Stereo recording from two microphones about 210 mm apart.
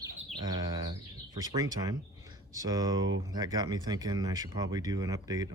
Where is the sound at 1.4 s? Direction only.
15° right (ahead or behind).